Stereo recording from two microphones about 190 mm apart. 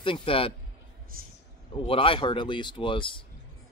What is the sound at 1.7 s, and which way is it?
Speech, 25° left (ahead or behind).